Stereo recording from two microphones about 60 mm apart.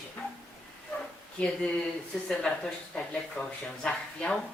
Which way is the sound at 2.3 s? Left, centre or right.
Centre.